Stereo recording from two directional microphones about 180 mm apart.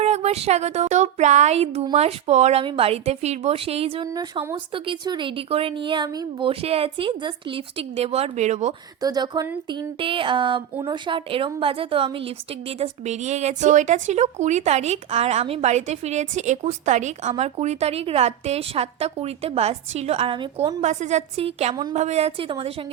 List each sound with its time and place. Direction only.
0.0 s a woman's voice: 35° right (ahead or behind)
4.0 s speech: 20° right (ahead or behind); by 8.7 s 40° right (ahead or behind)
9.0 s a woman's voice: 20° right (ahead or behind)
20.8 s a woman's voice: 40° right (ahead or behind)